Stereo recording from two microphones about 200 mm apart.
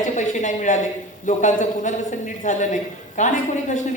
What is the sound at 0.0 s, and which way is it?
A man's voice, 40° left (ahead or behind).